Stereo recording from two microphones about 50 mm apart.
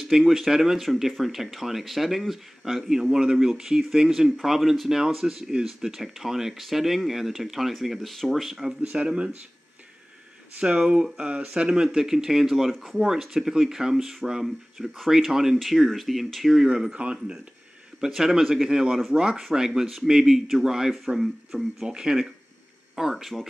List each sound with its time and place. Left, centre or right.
0.0 s speech: centre
8.9 s speech: centre
10.6 s speech: right; by 16.6 s centre
16.6 s speech: centre
18.0 s speech: centre